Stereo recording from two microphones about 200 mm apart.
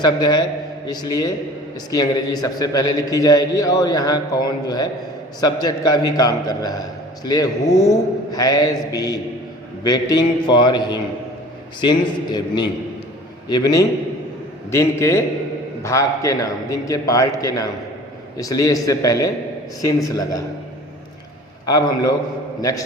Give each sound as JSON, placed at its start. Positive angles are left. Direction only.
{"t": 0.0, "sound": "a man's voice", "side_deg": 20}
{"t": 21.7, "sound": "a man's voice", "side_deg": 20}